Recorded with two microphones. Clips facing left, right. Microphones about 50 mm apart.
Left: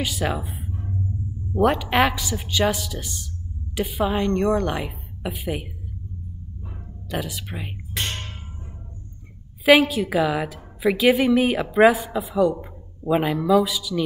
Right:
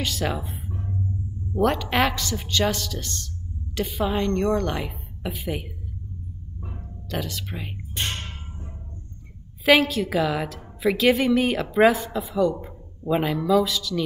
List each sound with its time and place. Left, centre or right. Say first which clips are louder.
0.0 s music: left 2 dB; centre
1.5 s a woman's voice: left 2 dB; centre
7.1 s a woman's voice: left 1 dB; centre
8.0 s music: left 1 dB; left
9.7 s a woman's voice: left 3 dB; centre